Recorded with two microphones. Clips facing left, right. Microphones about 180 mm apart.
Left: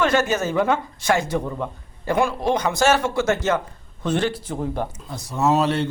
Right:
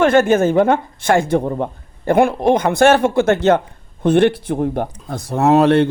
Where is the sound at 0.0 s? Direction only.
55° right (ahead or behind).